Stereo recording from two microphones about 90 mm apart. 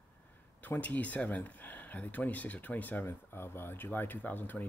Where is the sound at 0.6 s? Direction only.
15° left (ahead or behind).